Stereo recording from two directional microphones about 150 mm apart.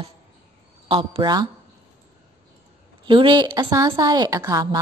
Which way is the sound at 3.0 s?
30° right (ahead or behind).